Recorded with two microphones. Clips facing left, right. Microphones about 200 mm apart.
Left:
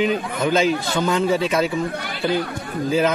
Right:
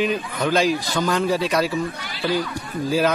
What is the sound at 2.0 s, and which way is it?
Speech, 55° left (ahead or behind).